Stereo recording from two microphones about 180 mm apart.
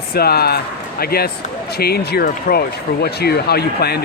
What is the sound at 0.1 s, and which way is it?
Speech, 60° left (ahead or behind).